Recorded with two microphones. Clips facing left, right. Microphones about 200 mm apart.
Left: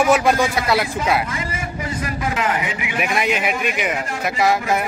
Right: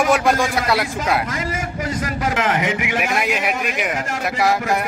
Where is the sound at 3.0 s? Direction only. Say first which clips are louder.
Left 5 dB; centre (ahead or behind).